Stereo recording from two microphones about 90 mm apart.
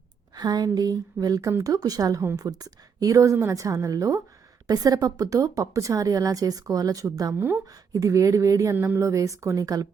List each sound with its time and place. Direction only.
0.3 s a woman's voice: 50° right (ahead or behind)
7.3 s speech: 25° right (ahead or behind)
7.7 s a woman's voice: 40° right (ahead or behind)
8.7 s speech: 20° right (ahead or behind)
9.0 s a woman's voice: 35° right (ahead or behind)